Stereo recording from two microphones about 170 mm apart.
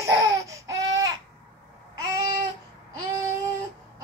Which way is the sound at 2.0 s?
20° right (ahead or behind).